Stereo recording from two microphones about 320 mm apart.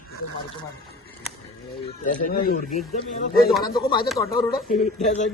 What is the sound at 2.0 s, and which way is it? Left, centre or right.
Speech, left.